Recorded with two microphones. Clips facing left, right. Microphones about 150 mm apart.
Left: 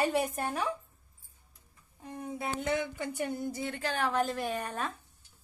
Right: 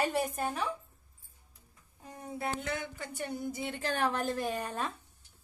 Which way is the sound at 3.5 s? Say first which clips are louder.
Even; 15° right (ahead or behind).